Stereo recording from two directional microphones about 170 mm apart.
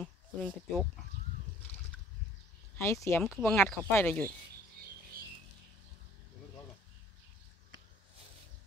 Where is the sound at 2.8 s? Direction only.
15° left (ahead or behind).